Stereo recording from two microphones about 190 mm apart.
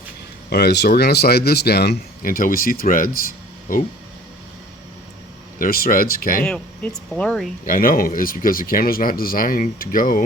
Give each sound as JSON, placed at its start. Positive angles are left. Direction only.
{"t": 0.5, "sound": "speech", "side_deg": 60}
{"t": 3.2, "sound": "a sound", "side_deg": 45}
{"t": 5.5, "sound": "speech", "side_deg": 50}
{"t": 6.4, "sound": "speech", "side_deg": 5}
{"t": 7.6, "sound": "speech", "side_deg": 45}